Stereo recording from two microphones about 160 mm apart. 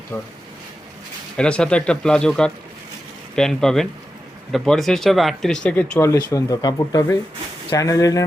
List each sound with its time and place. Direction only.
0.1 s speech: 10° left (ahead or behind)
1.4 s speech: 5° left (ahead or behind)
6.0 s speech: 20° left (ahead or behind)